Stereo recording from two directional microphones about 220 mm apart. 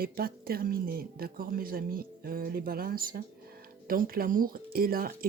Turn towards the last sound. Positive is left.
turn(degrees=-40)  # may be behind; listen again after turning